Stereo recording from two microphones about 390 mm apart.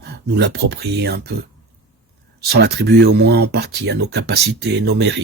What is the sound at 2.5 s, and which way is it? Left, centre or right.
Speech, right.